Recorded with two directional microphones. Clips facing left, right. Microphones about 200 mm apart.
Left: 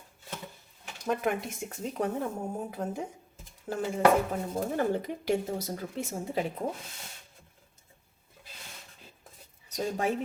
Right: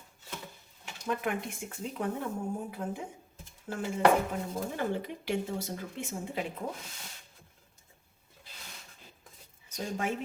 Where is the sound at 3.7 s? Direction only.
40° left (ahead or behind).